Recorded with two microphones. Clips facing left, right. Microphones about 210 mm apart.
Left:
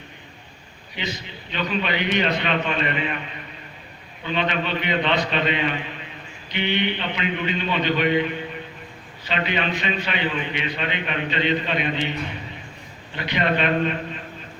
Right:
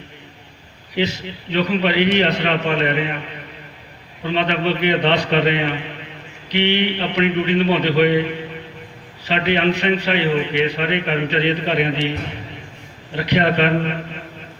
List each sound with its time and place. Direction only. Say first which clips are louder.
0.9 s a man's voice: right 10 dB; 80° right
4.2 s a man's voice: right 5 dB; 80° right
13.2 s a man's voice: right 5 dB; 75° right (ahead or behind)